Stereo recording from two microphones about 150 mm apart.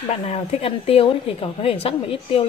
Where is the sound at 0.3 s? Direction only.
40° left (ahead or behind).